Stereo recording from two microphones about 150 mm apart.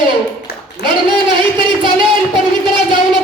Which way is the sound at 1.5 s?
30° right (ahead or behind).